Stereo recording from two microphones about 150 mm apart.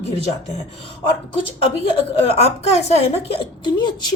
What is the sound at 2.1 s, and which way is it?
A woman's voice, 45° left (ahead or behind).